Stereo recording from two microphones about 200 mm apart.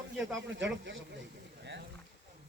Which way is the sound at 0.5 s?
65° right (ahead or behind).